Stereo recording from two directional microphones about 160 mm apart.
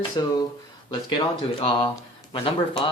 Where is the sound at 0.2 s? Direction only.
25° left (ahead or behind).